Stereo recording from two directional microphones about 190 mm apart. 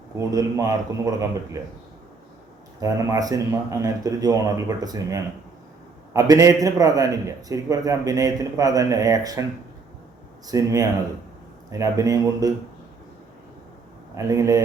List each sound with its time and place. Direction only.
0.2 s a man's voice: 15° right (ahead or behind)
2.8 s a man's voice: 20° right (ahead or behind)
10.4 s a man's voice: 20° right (ahead or behind)
14.2 s a man's voice: 15° right (ahead or behind)